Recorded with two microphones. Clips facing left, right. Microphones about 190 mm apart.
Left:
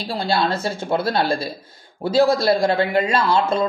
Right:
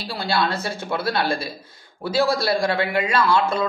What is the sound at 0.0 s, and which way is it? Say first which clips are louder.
Speech: left 2 dB; 30° left (ahead or behind).